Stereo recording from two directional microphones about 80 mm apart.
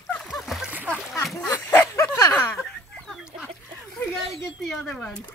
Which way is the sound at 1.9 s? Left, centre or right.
Left.